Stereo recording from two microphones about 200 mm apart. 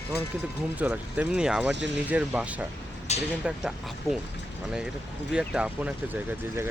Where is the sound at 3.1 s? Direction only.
35° left (ahead or behind).